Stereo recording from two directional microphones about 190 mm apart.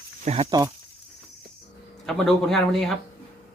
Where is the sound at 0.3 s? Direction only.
40° right (ahead or behind).